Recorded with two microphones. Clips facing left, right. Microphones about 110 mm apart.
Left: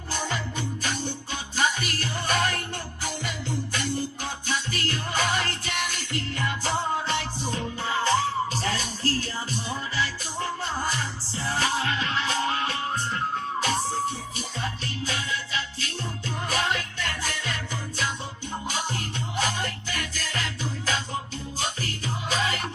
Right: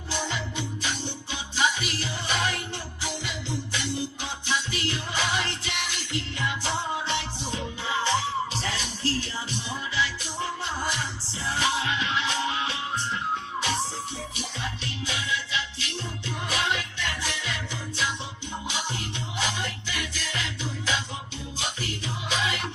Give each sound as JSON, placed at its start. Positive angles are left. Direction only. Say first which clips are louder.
{"t": 0.1, "sound": "music", "louder": "left 1 dB", "side_deg": 45}
{"t": 19.4, "sound": "music", "louder": "left 2 dB", "side_deg": 45}